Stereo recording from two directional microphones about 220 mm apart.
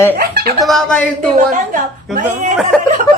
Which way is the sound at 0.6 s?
Centre (ahead or behind).